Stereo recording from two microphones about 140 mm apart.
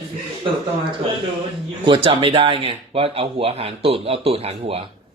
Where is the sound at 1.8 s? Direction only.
40° right (ahead or behind).